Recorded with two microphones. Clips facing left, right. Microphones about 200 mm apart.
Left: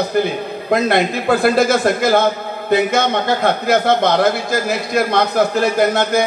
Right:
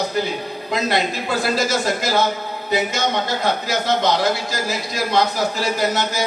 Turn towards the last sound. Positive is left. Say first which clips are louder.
# left 6 dB
turn(degrees=55)  # may be behind; listen again after turning